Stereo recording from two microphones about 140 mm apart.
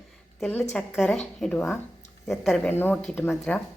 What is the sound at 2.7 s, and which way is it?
Speech, 15° left (ahead or behind).